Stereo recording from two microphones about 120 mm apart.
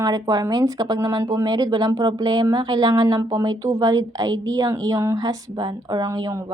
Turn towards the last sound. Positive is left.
turn(degrees=-30)  # may be behind; listen again after turning